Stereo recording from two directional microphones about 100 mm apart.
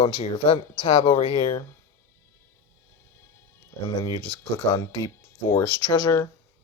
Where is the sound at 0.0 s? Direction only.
65° left (ahead or behind).